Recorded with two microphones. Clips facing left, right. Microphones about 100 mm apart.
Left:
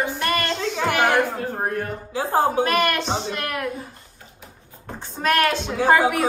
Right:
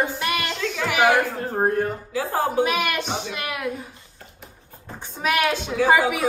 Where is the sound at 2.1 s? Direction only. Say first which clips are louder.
Left 7 dB; 30° left (ahead or behind).